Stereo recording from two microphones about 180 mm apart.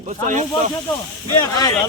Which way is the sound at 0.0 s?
45° right (ahead or behind).